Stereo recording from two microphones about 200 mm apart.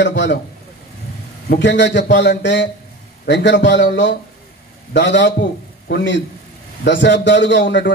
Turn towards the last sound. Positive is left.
turn(degrees=60)  # may be behind; listen again after turning